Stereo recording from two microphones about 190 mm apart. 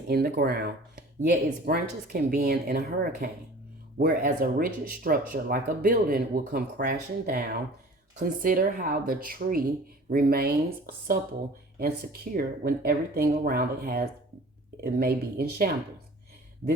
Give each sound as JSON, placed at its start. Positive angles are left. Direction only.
{"t": 0.1, "sound": "speech", "side_deg": -55}
{"t": 1.2, "sound": "speech", "side_deg": -40}
{"t": 1.6, "sound": "speech", "side_deg": -55}